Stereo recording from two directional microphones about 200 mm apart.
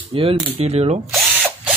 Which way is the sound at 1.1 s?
Centre (ahead or behind).